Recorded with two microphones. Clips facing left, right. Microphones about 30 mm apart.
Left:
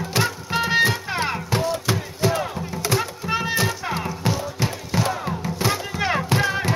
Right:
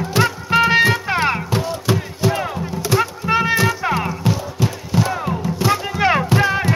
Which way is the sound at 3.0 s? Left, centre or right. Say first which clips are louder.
Right 7 dB; centre.